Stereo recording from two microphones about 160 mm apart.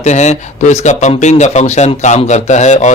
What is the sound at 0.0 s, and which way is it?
Speech, 45° left (ahead or behind).